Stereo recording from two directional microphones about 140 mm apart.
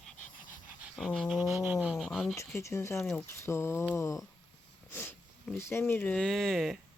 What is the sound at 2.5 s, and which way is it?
Speech, 20° left (ahead or behind).